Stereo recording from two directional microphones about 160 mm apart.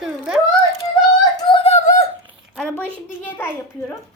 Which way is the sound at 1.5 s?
35° left (ahead or behind).